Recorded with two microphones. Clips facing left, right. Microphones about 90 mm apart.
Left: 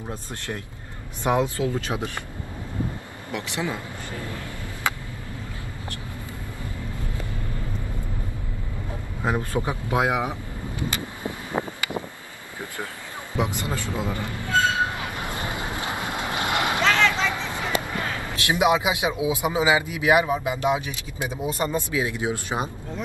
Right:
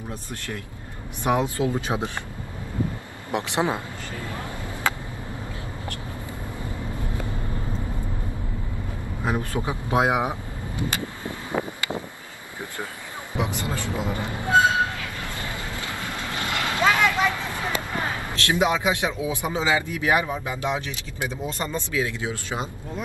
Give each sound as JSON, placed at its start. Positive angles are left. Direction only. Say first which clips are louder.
{"t": 0.1, "sound": "speech", "louder": "left 2 dB", "side_deg": 20}
{"t": 1.2, "sound": "speech", "louder": "even", "side_deg": -20}
{"t": 3.3, "sound": "speech", "louder": "right 5 dB", "side_deg": -20}
{"t": 9.2, "sound": "speech", "louder": "left 1 dB", "side_deg": 20}
{"t": 9.6, "sound": "speech", "louder": "right 3 dB", "side_deg": -20}
{"t": 11.6, "sound": "vehicle", "louder": "even", "side_deg": 20}
{"t": 13.3, "sound": "speech", "louder": "left 1 dB", "side_deg": -20}
{"t": 15.0, "sound": "vehicle", "louder": "left 3 dB", "side_deg": 20}
{"t": 16.8, "sound": "vehicle", "louder": "right 2 dB", "side_deg": -10}
{"t": 17.3, "sound": "a sound", "louder": "left 1 dB", "side_deg": 20}
{"t": 18.3, "sound": "a man's voice", "louder": "left 2 dB", "side_deg": 15}